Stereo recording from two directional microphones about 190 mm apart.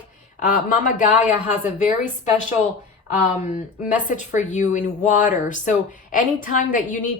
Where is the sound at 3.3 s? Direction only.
40° left (ahead or behind).